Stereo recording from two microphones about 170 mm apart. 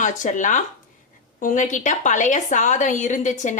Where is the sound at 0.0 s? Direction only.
45° left (ahead or behind).